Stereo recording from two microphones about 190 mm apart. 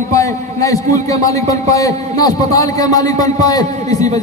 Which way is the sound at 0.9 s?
20° left (ahead or behind).